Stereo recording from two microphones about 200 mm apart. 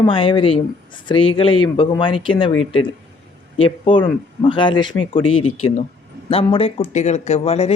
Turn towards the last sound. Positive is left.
turn(degrees=30)  # may be behind; listen again after turning